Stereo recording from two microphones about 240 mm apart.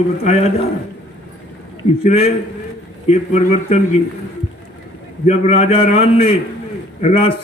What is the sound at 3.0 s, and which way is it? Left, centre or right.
Speech, left.